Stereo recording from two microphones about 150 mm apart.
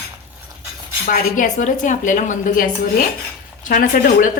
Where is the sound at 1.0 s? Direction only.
65° left (ahead or behind).